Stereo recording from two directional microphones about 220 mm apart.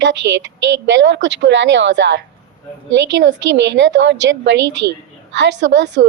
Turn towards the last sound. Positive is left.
turn(degrees=-50)  # may be behind; listen again after turning